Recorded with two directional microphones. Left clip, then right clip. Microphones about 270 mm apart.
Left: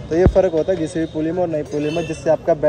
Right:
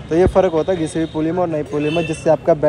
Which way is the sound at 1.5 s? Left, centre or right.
Centre.